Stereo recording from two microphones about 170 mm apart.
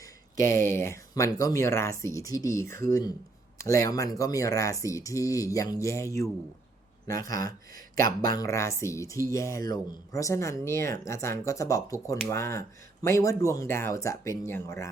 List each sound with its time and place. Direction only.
0.4 s speech: 15° left (ahead or behind)